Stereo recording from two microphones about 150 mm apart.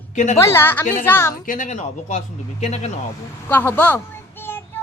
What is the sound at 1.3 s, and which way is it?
Speech, 60° left (ahead or behind).